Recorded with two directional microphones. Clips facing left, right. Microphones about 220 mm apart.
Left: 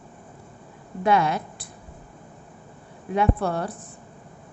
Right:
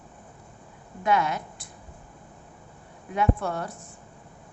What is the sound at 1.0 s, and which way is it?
Speech, 30° left (ahead or behind).